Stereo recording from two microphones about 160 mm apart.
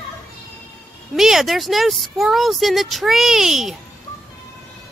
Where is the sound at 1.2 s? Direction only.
Centre (ahead or behind).